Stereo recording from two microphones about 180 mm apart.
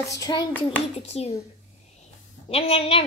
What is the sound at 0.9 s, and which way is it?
Speech, 35° left (ahead or behind).